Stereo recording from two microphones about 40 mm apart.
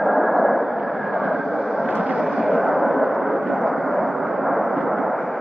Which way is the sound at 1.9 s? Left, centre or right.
Right.